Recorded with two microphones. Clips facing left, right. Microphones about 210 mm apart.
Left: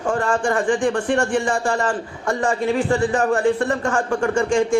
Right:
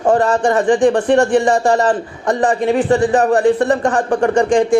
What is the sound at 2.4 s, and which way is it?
Speech, 20° right (ahead or behind).